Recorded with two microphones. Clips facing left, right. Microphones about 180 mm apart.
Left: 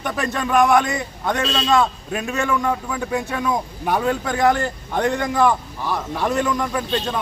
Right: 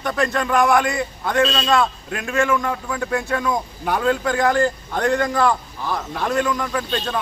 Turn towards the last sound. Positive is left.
turn(degrees=15)  # may be behind; listen again after turning